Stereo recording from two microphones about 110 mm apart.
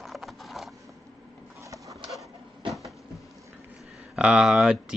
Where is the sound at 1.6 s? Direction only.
30° right (ahead or behind).